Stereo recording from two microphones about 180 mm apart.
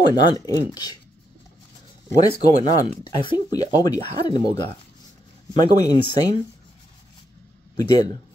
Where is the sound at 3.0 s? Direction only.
25° left (ahead or behind).